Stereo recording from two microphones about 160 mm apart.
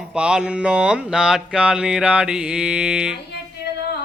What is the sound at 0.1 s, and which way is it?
Mantra, 5° right (ahead or behind).